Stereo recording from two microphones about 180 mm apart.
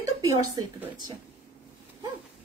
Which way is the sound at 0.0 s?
20° right (ahead or behind).